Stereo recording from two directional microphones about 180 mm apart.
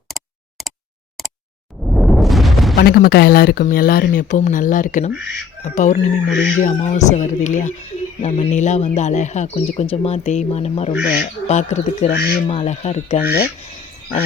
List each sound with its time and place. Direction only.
1.8 s a sound: centre (ahead or behind)
2.7 s speech: 60° left (ahead or behind); by 10.9 s 35° left (ahead or behind)
11.0 s speech: 50° left (ahead or behind)
12.1 s speech: 65° left (ahead or behind)
12.5 s speech: 35° left (ahead or behind)
13.2 s speech: 60° left (ahead or behind)